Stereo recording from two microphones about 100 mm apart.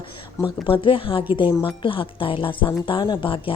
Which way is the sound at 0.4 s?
60° left (ahead or behind).